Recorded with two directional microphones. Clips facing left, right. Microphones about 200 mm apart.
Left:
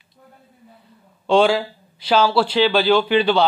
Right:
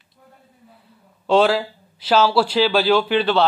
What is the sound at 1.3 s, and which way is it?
Speech, 5° right (ahead or behind).